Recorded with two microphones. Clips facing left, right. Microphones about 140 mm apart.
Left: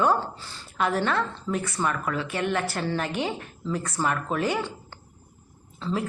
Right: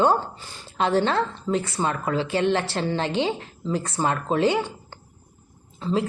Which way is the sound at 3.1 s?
25° right (ahead or behind).